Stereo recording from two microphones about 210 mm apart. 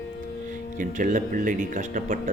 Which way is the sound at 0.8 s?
40° right (ahead or behind).